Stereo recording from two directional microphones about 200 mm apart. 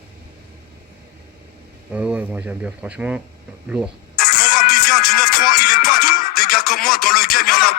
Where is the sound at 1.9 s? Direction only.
5° right (ahead or behind).